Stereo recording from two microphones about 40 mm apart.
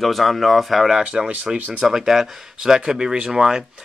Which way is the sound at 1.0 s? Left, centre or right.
Right.